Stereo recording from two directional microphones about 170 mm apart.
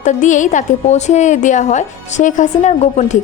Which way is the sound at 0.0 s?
45° left (ahead or behind).